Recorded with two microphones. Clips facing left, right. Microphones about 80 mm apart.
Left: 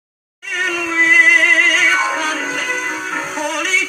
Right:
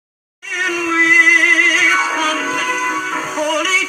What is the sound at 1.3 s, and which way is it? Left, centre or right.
Music, centre.